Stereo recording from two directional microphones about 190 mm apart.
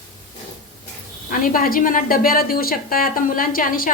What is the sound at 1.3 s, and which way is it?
A woman's voice, 50° left (ahead or behind).